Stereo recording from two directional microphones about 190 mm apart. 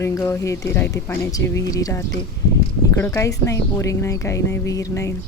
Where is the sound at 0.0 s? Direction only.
15° left (ahead or behind).